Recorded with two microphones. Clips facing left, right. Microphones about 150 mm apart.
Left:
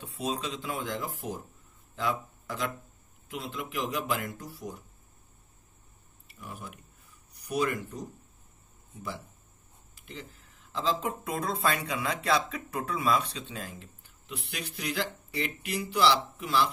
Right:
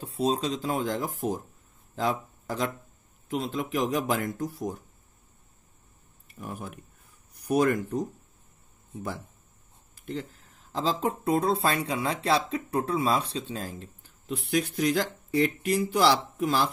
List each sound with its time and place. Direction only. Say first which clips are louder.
0.0 s speech: right 7 dB; 35° right (ahead or behind)
6.3 s a sound: right 5 dB; 50° right (ahead or behind)
9.9 s speech: right 10 dB; 50° right (ahead or behind)